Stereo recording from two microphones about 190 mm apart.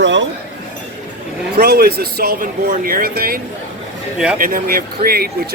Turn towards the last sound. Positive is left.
turn(degrees=-55)  # may be behind; listen again after turning